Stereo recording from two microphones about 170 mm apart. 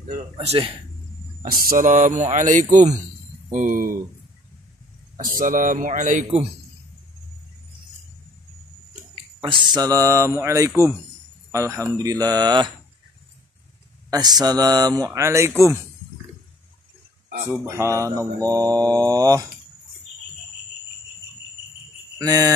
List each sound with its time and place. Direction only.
0.1 s speech: 40° right (ahead or behind)
1.4 s speech: 55° right (ahead or behind)
5.1 s speech: 55° right (ahead or behind)
9.1 s speech: 30° right (ahead or behind)
14.1 s speech: 25° right (ahead or behind)
17.6 s speech: 15° right (ahead or behind)
22.2 s speech: 20° right (ahead or behind)